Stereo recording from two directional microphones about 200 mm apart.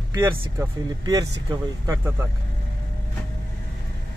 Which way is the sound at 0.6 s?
15° right (ahead or behind).